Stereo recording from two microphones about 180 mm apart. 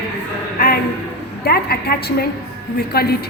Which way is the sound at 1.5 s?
60° left (ahead or behind).